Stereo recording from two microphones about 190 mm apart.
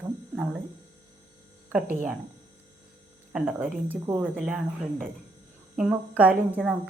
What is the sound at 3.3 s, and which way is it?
A woman's voice, 10° right (ahead or behind).